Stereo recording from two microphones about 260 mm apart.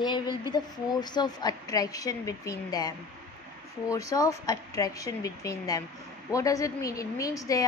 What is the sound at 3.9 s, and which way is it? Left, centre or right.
A woman's voice, centre.